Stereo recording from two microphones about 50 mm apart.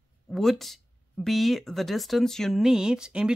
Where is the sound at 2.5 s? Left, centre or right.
Centre.